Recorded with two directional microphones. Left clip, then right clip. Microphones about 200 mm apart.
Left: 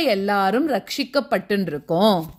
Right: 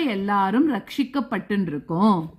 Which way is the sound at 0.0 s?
20° left (ahead or behind).